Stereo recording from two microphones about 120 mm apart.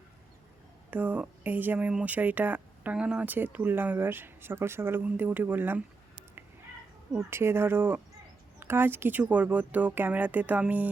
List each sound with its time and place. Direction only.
0.9 s speech: 10° right (ahead or behind)
7.2 s speech: 20° right (ahead or behind)